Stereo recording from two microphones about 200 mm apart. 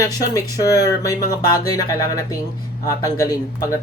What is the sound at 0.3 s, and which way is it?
Speech, 15° left (ahead or behind).